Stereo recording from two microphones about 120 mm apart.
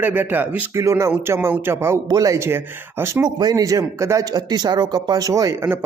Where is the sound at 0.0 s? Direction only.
15° right (ahead or behind).